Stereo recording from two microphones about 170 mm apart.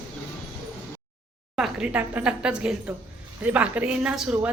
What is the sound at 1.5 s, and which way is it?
A woman's voice, 5° right (ahead or behind).